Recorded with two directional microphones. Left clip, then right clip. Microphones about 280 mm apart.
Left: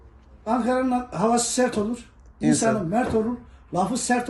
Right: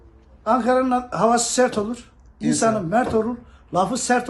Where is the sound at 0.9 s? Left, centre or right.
Centre.